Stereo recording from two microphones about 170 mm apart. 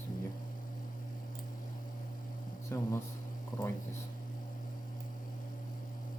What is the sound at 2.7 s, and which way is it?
Speech, 15° left (ahead or behind).